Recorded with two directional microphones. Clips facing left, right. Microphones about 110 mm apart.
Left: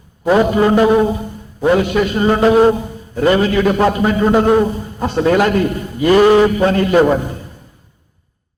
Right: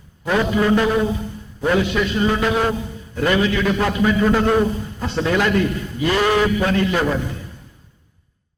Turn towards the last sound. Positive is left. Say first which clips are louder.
# left 8 dB
turn(degrees=40)  # may be behind; listen again after turning